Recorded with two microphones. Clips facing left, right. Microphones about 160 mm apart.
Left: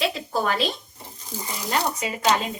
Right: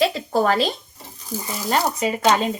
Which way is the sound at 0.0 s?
40° right (ahead or behind).